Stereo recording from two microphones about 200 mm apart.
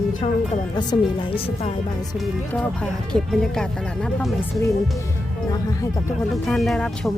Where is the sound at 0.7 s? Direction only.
25° left (ahead or behind).